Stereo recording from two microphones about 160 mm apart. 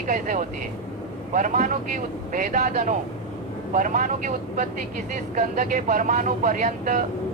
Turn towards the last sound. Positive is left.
turn(degrees=-55)  # may be behind; listen again after turning